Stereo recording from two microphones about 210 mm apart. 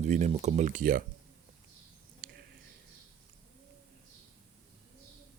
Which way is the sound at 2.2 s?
50° right (ahead or behind).